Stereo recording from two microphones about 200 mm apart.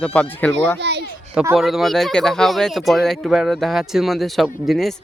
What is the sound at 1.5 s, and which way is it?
Speech, centre (ahead or behind).